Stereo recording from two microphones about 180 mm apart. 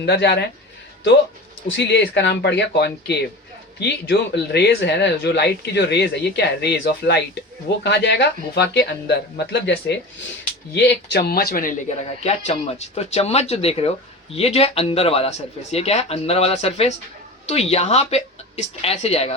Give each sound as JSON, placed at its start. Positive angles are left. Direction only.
{"t": 0.0, "sound": "speech", "side_deg": 70}
{"t": 1.6, "sound": "speech", "side_deg": 70}
{"t": 12.2, "sound": "speech", "side_deg": 35}